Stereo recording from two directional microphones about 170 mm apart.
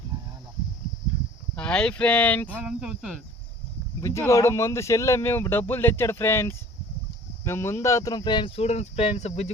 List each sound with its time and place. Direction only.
0.1 s a sound: 25° right (ahead or behind)
1.5 s speech: 5° left (ahead or behind)
2.8 s cricket: centre (ahead or behind)
4.0 s speech: 15° left (ahead or behind); by 9.5 s 40° left (ahead or behind)